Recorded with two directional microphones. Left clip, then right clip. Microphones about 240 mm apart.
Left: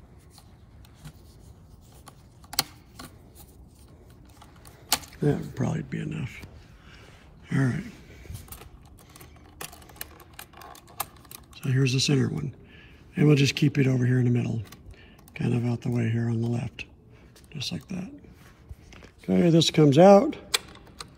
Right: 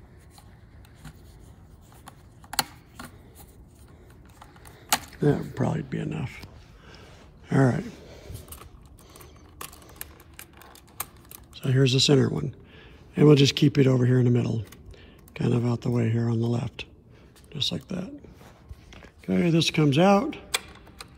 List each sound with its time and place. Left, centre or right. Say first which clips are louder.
5.2 s speech: right 3 dB; centre
7.4 s a sound: right 6 dB; centre
11.5 s speech: right 4 dB; centre